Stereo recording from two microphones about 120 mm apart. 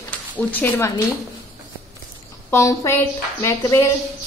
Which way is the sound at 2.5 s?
25° left (ahead or behind).